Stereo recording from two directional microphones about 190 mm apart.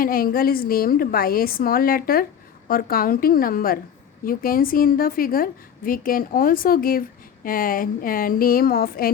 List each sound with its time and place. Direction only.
0.0 s a woman's voice: 50° left (ahead or behind)